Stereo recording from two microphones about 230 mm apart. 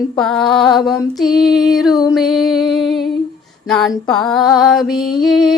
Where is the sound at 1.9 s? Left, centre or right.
Centre.